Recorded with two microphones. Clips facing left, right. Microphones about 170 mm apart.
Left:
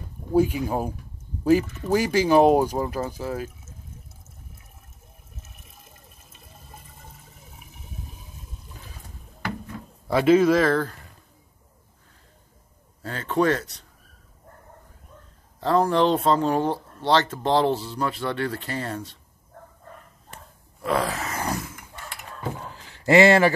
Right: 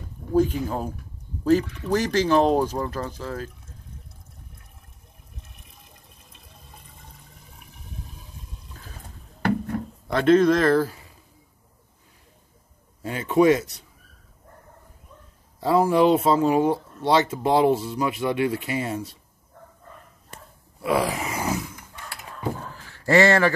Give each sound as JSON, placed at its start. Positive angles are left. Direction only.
{"t": 0.3, "sound": "speech", "side_deg": 10}
{"t": 5.3, "sound": "water", "side_deg": 5}
{"t": 9.4, "sound": "a sound", "side_deg": -60}
{"t": 10.1, "sound": "speech", "side_deg": 5}
{"t": 13.0, "sound": "speech", "side_deg": -10}
{"t": 15.6, "sound": "speech", "side_deg": -10}
{"t": 20.8, "sound": "grunt", "side_deg": -10}
{"t": 21.5, "sound": "chainsaw", "side_deg": 0}
{"t": 22.7, "sound": "a sound", "side_deg": 20}